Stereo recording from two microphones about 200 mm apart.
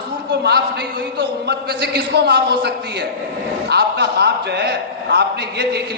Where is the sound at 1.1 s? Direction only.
50° right (ahead or behind).